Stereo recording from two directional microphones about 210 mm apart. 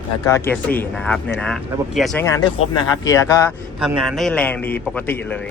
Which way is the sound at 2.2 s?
15° left (ahead or behind).